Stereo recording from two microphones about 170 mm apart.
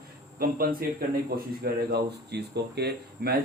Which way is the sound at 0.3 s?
60° right (ahead or behind).